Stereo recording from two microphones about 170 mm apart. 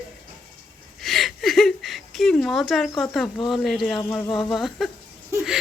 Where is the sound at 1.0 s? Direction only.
Centre (ahead or behind).